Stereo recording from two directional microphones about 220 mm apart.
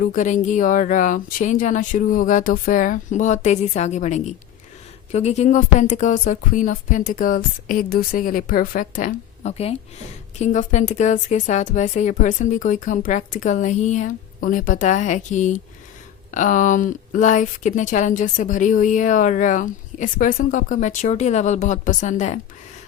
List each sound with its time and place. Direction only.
0.0 s speech: 35° left (ahead or behind)